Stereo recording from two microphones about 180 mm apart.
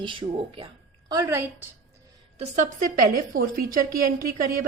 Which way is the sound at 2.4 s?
45° right (ahead or behind).